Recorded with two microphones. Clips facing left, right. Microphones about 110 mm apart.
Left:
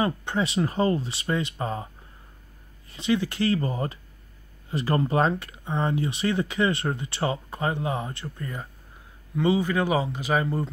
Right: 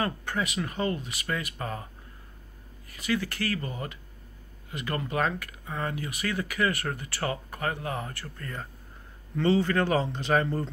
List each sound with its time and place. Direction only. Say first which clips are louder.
0.0 s speech: left 4 dB; 20° left (ahead or behind)
2.9 s speech: left 5 dB; 25° left (ahead or behind)